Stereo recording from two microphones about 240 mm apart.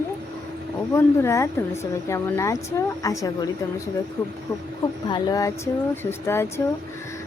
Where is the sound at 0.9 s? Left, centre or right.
Centre.